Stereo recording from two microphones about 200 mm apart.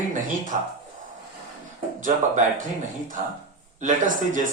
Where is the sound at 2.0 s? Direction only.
40° right (ahead or behind).